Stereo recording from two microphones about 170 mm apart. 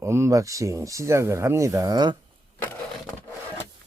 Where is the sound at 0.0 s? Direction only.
15° right (ahead or behind).